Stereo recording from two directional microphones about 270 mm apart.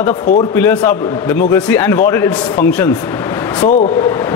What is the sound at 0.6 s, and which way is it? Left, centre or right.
A man's voice, centre.